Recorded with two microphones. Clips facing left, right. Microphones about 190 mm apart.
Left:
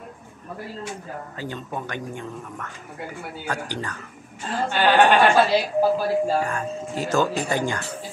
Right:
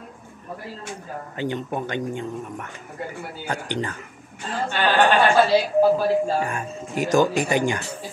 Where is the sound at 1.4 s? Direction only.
20° right (ahead or behind).